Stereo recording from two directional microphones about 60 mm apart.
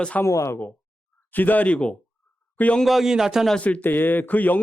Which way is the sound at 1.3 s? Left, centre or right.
Left.